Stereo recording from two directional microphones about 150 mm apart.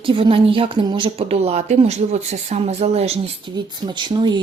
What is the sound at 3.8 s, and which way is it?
Speech, 30° right (ahead or behind).